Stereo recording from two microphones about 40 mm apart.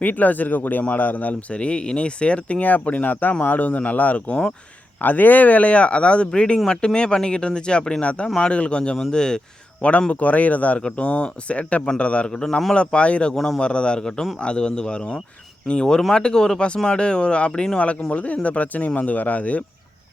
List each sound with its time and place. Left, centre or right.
0.0 s a man's voice: left
2.6 s a man's voice: left
9.0 s speech: centre
10.1 s a man's voice: left
12.3 s speech: centre
12.7 s speech: left
13.3 s speech: centre
13.6 s a man's voice: left